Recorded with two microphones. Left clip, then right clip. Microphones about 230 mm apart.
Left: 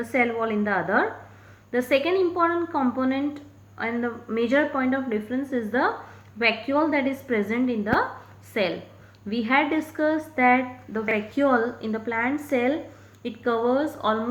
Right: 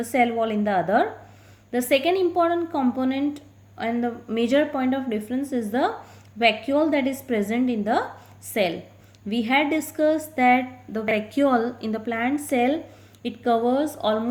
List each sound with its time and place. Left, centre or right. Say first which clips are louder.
0.0 s a woman's voice: right 2 dB; right